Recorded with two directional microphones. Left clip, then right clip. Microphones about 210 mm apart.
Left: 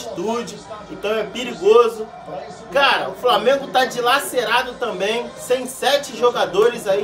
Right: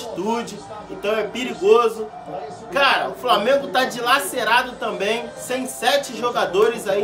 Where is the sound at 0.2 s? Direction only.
Centre (ahead or behind).